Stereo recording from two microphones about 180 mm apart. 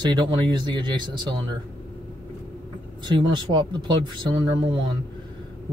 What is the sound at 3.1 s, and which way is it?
Speech, 25° right (ahead or behind).